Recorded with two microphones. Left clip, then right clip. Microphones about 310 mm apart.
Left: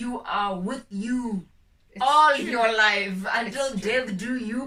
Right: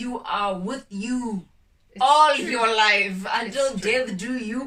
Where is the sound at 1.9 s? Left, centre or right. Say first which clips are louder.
Right 2 dB; centre.